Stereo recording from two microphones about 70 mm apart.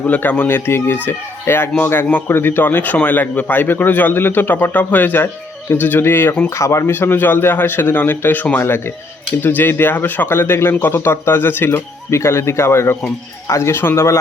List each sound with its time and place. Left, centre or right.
0.0 s a man's voice: left
6.9 s a man's voice: left